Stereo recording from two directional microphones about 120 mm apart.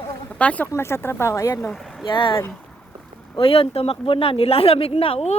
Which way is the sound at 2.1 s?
45° left (ahead or behind).